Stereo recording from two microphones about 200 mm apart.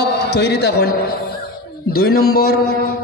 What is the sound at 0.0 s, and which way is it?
A man's voice, 60° left (ahead or behind).